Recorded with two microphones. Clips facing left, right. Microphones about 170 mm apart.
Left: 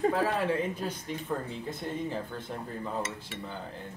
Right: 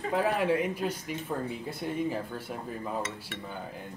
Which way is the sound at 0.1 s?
15° right (ahead or behind).